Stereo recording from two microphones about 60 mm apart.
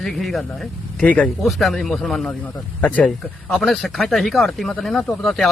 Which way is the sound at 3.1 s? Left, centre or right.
Centre.